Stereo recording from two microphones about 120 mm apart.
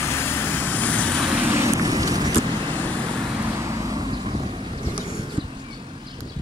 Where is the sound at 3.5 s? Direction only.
25° right (ahead or behind).